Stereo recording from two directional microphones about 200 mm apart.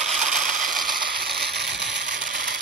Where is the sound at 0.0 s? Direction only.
Centre (ahead or behind).